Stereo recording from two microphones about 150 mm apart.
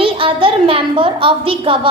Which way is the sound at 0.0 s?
35° right (ahead or behind).